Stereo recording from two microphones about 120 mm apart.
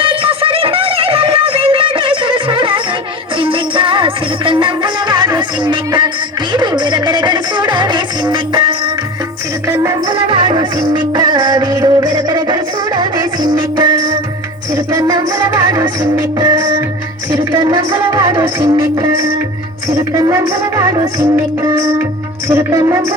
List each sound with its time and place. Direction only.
0.0 s music: 45° right (ahead or behind)
9.6 s music: 25° right (ahead or behind)
10.1 s music: 45° right (ahead or behind)
10.8 s music: 35° right (ahead or behind)
20.0 s music: 35° right (ahead or behind)